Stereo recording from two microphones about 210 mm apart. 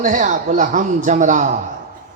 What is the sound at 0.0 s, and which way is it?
A man's voice, 35° right (ahead or behind).